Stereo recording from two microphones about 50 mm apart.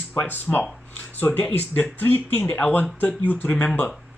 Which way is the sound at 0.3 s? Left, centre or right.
Left.